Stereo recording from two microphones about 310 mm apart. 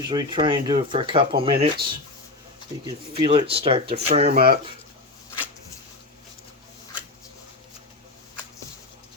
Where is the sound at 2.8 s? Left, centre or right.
Centre.